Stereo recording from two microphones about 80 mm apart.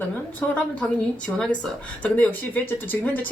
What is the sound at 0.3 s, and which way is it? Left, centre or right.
Speech, centre.